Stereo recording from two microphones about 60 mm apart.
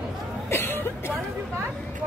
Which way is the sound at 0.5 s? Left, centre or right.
Left.